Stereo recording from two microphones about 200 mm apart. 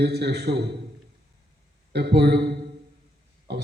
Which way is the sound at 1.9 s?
55° right (ahead or behind).